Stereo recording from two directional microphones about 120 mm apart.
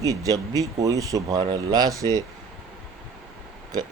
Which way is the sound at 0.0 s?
30° right (ahead or behind).